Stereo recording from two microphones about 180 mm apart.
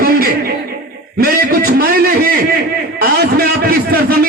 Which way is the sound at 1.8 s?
60° right (ahead or behind).